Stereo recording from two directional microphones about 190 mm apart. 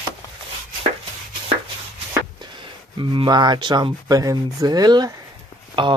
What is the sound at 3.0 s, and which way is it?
Speech, 25° right (ahead or behind).